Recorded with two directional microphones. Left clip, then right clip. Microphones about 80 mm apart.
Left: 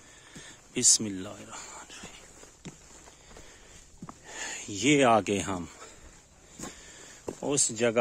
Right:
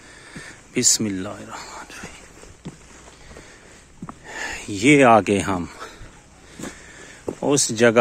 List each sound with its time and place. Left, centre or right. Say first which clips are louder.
0.3 s a sound: right 10 dB; centre
0.7 s speech: right 5 dB; centre
4.3 s speech: right 9 dB; centre
7.4 s speech: right 10 dB; centre